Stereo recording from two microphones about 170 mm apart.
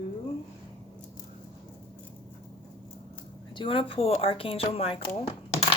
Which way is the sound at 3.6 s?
30° left (ahead or behind).